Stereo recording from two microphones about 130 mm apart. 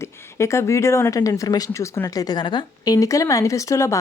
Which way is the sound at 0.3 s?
20° left (ahead or behind).